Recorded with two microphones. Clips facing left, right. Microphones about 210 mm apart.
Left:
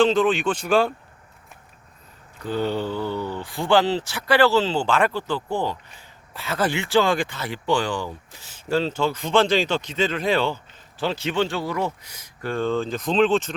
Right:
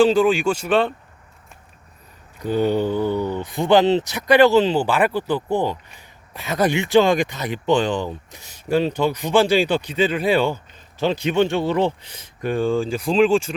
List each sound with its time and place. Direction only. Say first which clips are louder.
0.3 s speech: right 2 dB; 10° right (ahead or behind)
2.4 s speech: right 5 dB; 15° right (ahead or behind)